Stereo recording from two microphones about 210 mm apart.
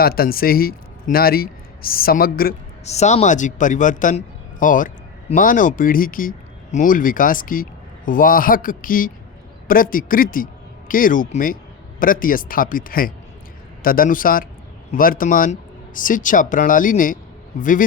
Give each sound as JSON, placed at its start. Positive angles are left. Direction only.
{"t": 0.0, "sound": "a man's voice", "side_deg": 45}
{"t": 2.8, "sound": "a man's voice", "side_deg": 30}